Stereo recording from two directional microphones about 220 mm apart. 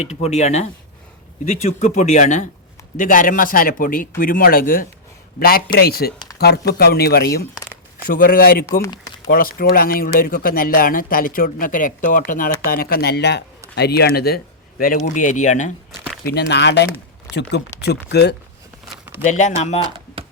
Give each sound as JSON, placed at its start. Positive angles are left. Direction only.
{"t": 0.0, "sound": "speech", "side_deg": 30}
{"t": 8.8, "sound": "a sound", "side_deg": 20}
{"t": 9.3, "sound": "speech", "side_deg": 40}
{"t": 16.2, "sound": "speech", "side_deg": 50}
{"t": 19.2, "sound": "speech", "side_deg": 35}